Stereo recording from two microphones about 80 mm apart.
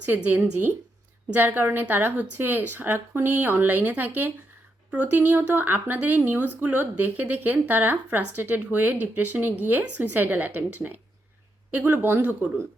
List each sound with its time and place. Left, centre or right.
0.0 s speech: right